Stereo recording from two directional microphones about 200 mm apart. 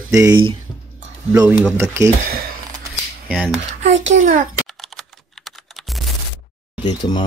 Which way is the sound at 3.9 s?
70° right (ahead or behind).